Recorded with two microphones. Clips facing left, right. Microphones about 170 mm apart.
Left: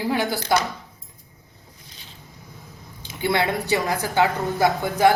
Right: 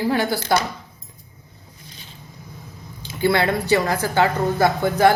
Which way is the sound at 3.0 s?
20° left (ahead or behind).